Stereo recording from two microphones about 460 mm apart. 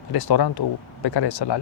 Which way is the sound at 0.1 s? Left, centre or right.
Left.